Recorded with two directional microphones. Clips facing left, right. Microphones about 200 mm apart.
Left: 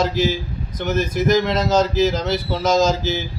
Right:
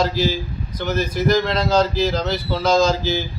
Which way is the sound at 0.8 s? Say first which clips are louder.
Left 1 dB; 45° left (ahead or behind).